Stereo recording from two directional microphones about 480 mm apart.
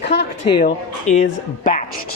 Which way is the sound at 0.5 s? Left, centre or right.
Centre.